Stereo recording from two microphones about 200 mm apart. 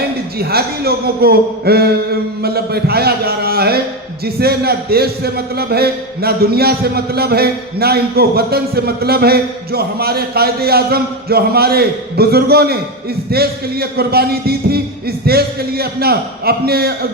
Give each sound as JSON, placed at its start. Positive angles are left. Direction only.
{"t": 0.3, "sound": "a man's voice", "side_deg": -50}